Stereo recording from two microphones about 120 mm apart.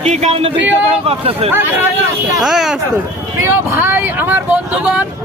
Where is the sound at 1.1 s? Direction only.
55° right (ahead or behind).